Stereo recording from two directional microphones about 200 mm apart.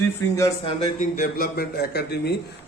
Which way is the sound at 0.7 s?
40° left (ahead or behind).